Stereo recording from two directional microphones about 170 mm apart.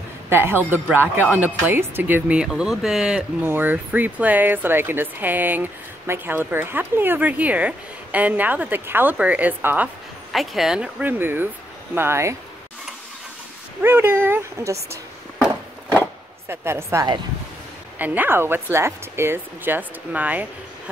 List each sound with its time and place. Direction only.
0.3 s speech: 15° right (ahead or behind)
10.3 s speech: centre (ahead or behind)
13.8 s speech: 10° right (ahead or behind)
16.4 s speech: 15° right (ahead or behind)